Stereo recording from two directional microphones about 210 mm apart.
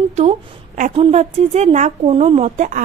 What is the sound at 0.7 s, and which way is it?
A woman's voice, 35° right (ahead or behind).